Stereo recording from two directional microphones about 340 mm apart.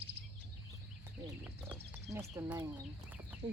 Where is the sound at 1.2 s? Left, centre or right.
Centre.